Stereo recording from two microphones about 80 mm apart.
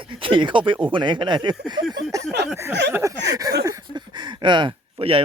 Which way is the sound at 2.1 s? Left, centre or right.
Right.